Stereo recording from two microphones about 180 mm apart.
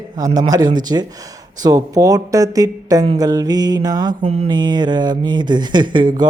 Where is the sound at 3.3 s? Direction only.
20° right (ahead or behind).